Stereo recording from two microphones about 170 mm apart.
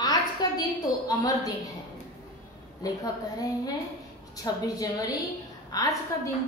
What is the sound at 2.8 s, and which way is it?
Speech, 20° left (ahead or behind).